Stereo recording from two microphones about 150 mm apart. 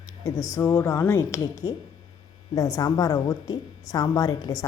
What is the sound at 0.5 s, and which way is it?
A woman's voice, 15° left (ahead or behind).